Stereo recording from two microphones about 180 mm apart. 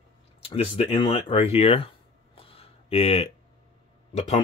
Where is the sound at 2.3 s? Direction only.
30° left (ahead or behind).